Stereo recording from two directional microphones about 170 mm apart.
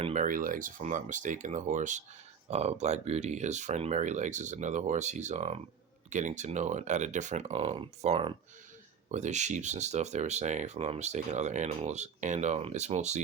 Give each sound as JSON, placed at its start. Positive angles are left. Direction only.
{"t": 0.0, "sound": "speech", "side_deg": -45}